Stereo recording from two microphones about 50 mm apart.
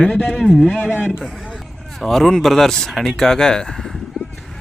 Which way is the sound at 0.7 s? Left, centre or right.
Left.